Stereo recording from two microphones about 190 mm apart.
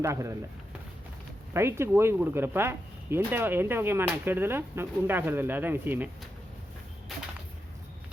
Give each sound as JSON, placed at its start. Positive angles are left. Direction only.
{"t": 0.0, "sound": "speech", "side_deg": -15}
{"t": 1.5, "sound": "speech", "side_deg": -15}